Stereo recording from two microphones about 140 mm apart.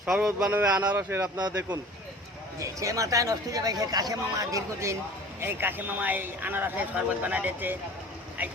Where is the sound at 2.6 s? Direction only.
25° right (ahead or behind).